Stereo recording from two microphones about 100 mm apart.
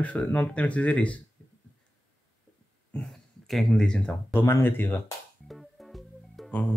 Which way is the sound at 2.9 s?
15° left (ahead or behind).